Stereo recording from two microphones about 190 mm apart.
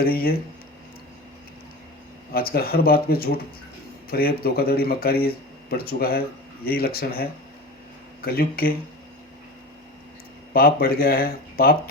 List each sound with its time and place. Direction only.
0.0 s speech: 55° left (ahead or behind)
2.3 s speech: 50° left (ahead or behind)
10.5 s speech: 50° left (ahead or behind)